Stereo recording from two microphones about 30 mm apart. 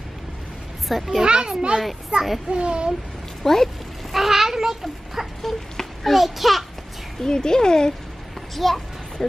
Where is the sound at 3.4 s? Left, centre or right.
Centre.